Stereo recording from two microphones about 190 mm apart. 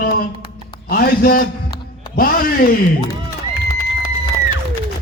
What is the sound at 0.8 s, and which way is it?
A woman's voice, 50° left (ahead or behind).